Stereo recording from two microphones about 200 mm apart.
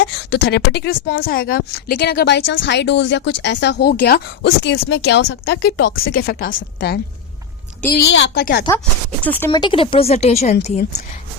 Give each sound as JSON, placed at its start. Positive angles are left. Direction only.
{"t": 0.0, "sound": "speech", "side_deg": 60}
{"t": 6.1, "sound": "speech", "side_deg": 45}
{"t": 9.2, "sound": "speech", "side_deg": 10}
{"t": 9.5, "sound": "a woman's voice", "side_deg": 25}